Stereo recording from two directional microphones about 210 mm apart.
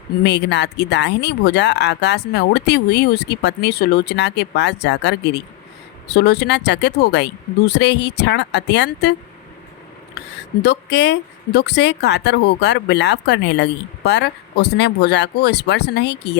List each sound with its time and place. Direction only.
0.2 s a woman's voice: 55° left (ahead or behind)
10.2 s a woman's voice: 50° left (ahead or behind)